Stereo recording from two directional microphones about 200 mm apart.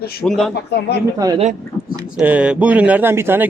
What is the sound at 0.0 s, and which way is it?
Speech, 50° left (ahead or behind).